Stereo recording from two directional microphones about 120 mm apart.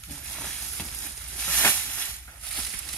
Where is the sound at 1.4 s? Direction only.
15° left (ahead or behind).